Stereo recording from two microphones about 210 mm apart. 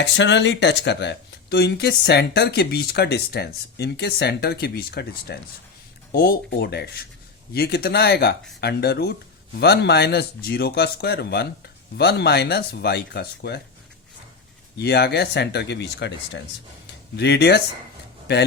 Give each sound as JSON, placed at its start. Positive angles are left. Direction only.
{"t": 0.0, "sound": "speech", "side_deg": 55}
{"t": 14.8, "sound": "speech", "side_deg": 50}
{"t": 16.8, "sound": "a sound", "side_deg": 55}